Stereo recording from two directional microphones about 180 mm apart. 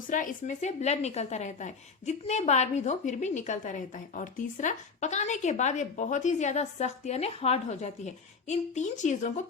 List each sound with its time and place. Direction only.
0.1 s a woman's voice: 45° left (ahead or behind)